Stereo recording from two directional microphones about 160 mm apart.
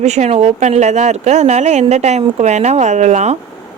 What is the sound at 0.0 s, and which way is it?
Speech, 45° right (ahead or behind).